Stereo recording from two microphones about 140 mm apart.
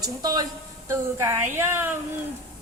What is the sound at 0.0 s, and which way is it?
A woman's voice, 25° right (ahead or behind).